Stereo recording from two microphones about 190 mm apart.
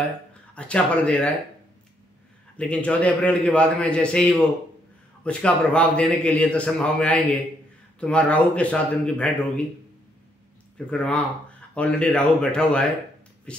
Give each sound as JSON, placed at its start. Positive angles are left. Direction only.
{"t": 0.6, "sound": "a man's voice", "side_deg": 5}
{"t": 2.5, "sound": "a man's voice", "side_deg": 5}
{"t": 10.9, "sound": "speech", "side_deg": 5}